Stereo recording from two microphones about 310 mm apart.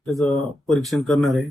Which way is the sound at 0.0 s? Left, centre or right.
Centre.